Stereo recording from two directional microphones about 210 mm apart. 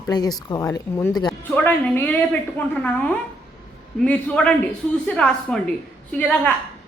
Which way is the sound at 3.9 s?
5° left (ahead or behind).